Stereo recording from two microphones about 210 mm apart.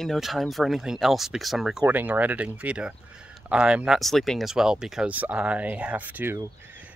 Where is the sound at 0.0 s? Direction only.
Centre (ahead or behind).